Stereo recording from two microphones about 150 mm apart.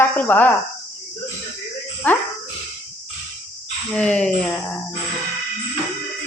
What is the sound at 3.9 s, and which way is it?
Speech, 10° left (ahead or behind).